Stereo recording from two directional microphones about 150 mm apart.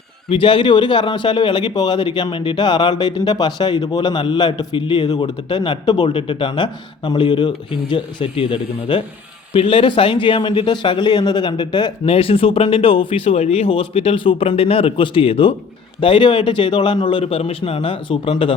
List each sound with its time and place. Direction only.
0.3 s a man's voice: 35° left (ahead or behind)